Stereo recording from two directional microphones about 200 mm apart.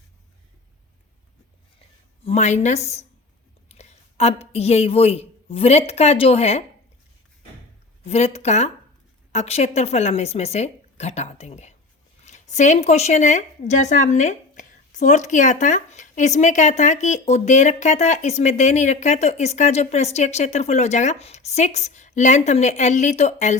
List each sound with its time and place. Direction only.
2.2 s a woman's voice: 35° left (ahead or behind)
8.0 s speech: 30° left (ahead or behind)